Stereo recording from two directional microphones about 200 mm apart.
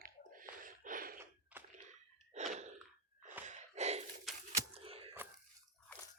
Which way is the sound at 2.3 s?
35° right (ahead or behind).